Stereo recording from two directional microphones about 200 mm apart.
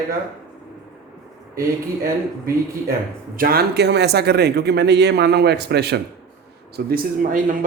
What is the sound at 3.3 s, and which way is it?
A man's voice, 50° right (ahead or behind).